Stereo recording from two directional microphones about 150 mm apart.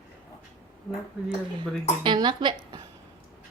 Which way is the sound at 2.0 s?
30° right (ahead or behind).